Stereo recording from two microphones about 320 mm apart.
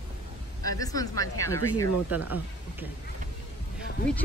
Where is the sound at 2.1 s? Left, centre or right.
Centre.